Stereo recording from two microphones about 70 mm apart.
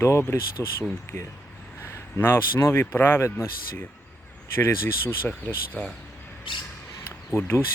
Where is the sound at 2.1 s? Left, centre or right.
Left.